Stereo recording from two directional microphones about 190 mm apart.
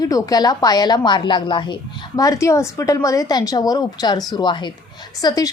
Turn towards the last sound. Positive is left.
turn(degrees=20)  # may be behind; listen again after turning